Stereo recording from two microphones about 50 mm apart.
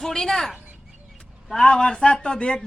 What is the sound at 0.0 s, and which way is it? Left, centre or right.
Speech, centre.